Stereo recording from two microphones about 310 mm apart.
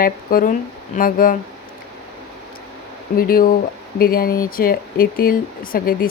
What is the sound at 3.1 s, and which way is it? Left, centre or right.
A woman's voice, left.